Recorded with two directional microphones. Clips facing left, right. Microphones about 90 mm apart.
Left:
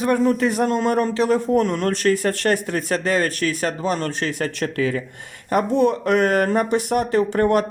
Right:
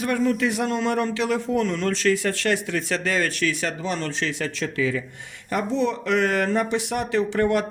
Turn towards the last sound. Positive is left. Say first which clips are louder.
# left 4 dB
turn(degrees=45)  # may be behind; listen again after turning